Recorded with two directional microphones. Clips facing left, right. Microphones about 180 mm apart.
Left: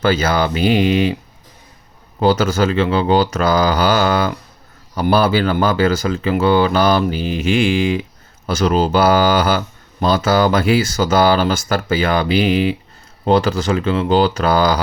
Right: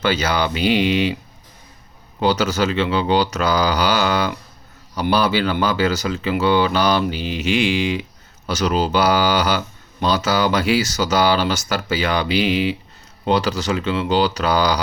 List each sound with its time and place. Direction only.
0.0 s speech: 50° left (ahead or behind)
2.1 s speech: 50° left (ahead or behind)